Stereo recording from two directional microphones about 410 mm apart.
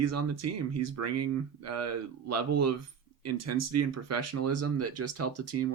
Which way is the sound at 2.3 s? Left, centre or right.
Right.